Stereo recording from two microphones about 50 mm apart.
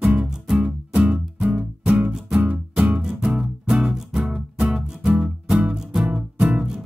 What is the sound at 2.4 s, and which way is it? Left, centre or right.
Music, right.